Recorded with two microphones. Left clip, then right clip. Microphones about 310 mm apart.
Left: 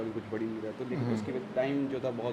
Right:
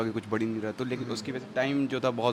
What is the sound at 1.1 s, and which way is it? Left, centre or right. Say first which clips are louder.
Speech: right 1 dB; right.